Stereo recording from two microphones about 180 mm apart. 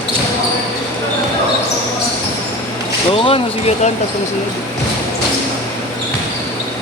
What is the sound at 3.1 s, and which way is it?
Speech, 35° left (ahead or behind).